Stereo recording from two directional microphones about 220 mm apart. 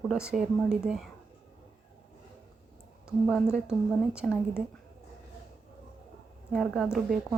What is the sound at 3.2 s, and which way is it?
A woman's voice, 5° right (ahead or behind).